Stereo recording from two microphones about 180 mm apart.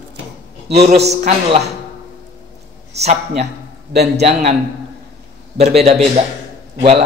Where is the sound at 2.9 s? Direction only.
35° right (ahead or behind).